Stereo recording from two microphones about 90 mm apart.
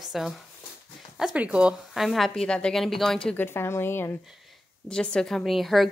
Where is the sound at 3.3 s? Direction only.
25° left (ahead or behind).